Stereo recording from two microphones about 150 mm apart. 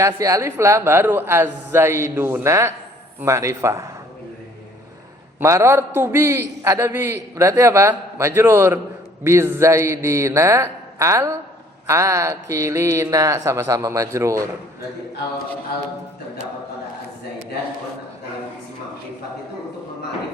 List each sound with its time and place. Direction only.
0.0 s a man's voice: 20° right (ahead or behind)
5.4 s a man's voice: 20° right (ahead or behind)